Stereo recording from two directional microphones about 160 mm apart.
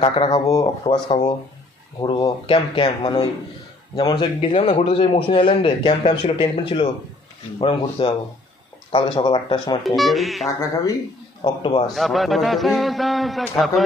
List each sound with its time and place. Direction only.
0.0 s speech: 25° left (ahead or behind)
0.8 s a man's voice: 30° left (ahead or behind)
9.8 s a man's voice: centre (ahead or behind)
10.6 s speech: 20° left (ahead or behind)
11.4 s a man's voice: 35° left (ahead or behind)
11.9 s a man's voice: centre (ahead or behind)